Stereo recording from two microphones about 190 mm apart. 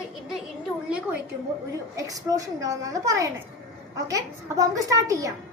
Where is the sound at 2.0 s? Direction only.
20° right (ahead or behind).